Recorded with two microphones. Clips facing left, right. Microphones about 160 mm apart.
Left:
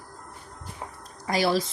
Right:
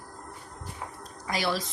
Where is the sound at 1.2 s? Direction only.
35° left (ahead or behind).